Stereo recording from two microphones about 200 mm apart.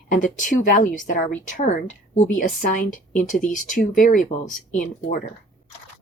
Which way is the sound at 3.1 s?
40° left (ahead or behind).